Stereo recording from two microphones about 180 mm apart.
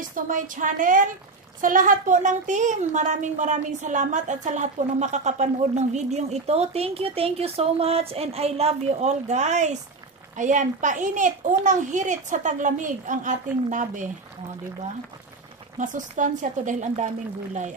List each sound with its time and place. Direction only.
0.1 s a child's voice: 45° right (ahead or behind)
15.8 s a child's voice: 45° right (ahead or behind)